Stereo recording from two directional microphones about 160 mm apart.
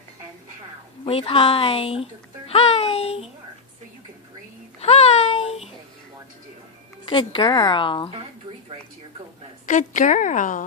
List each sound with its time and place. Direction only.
1.0 s speech: 35° left (ahead or behind)
4.8 s a sound: 40° left (ahead or behind)
7.0 s speech: 30° left (ahead or behind)
9.6 s a woman's voice: 50° left (ahead or behind)